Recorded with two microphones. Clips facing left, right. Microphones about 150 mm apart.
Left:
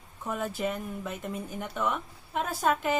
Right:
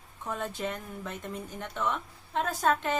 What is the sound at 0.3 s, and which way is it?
A woman's voice, 10° left (ahead or behind).